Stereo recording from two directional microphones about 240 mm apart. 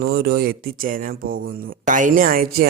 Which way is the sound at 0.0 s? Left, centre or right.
Right.